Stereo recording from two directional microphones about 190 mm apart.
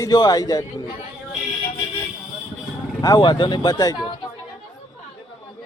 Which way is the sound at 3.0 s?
20° left (ahead or behind).